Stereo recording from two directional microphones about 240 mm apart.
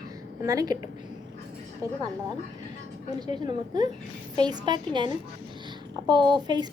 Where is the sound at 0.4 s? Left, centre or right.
Centre.